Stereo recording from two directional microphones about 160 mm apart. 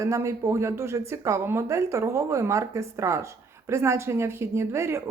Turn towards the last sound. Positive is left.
turn(degrees=-15)  # may be behind; listen again after turning